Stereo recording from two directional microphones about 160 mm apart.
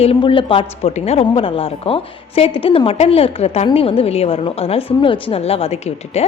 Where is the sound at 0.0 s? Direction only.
35° left (ahead or behind).